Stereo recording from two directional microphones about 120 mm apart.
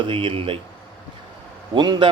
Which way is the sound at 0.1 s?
50° right (ahead or behind).